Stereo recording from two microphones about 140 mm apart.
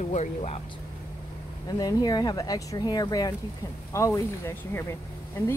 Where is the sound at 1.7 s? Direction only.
25° left (ahead or behind).